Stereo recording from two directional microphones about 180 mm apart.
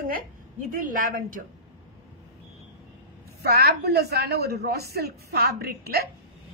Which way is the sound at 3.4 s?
60° right (ahead or behind).